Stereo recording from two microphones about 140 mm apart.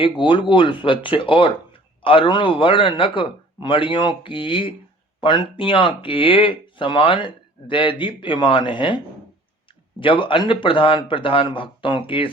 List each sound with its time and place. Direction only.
0.0 s speech: 35° left (ahead or behind)
10.0 s speech: 40° left (ahead or behind)